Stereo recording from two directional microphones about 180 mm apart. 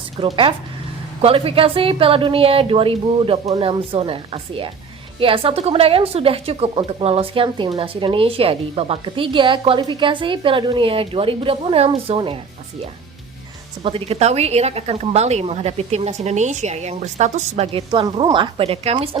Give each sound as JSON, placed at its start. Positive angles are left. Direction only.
{"t": 0.2, "sound": "a woman's voice", "side_deg": -30}
{"t": 13.8, "sound": "a woman's voice", "side_deg": -30}